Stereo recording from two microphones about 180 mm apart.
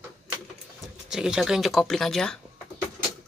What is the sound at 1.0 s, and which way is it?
Speech, 5° right (ahead or behind).